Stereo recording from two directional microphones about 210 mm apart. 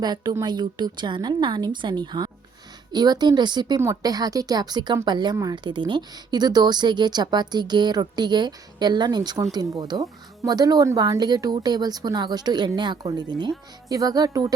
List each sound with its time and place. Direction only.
0.0 s speech: 20° right (ahead or behind)